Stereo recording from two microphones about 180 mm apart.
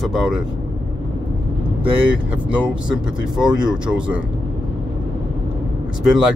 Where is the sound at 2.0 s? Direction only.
5° right (ahead or behind).